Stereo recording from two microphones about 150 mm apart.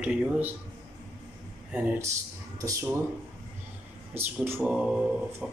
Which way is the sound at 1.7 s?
10° right (ahead or behind).